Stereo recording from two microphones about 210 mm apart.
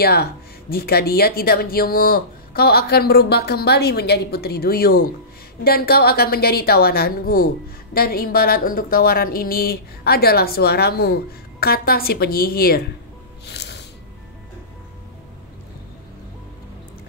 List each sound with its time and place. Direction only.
0.0 s a woman's voice: 50° left (ahead or behind)
13.5 s music: 55° left (ahead or behind)